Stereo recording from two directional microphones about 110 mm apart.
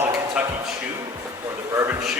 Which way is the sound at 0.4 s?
10° right (ahead or behind).